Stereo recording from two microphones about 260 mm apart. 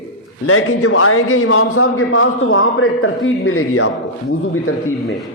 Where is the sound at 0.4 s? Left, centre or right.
Left.